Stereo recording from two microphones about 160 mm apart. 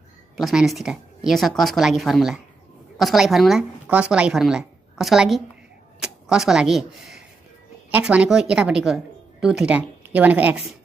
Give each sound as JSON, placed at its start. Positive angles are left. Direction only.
{"t": 0.4, "sound": "a woman's voice", "side_deg": 0}